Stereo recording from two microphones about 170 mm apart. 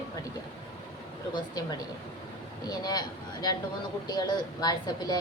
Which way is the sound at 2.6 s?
25° left (ahead or behind).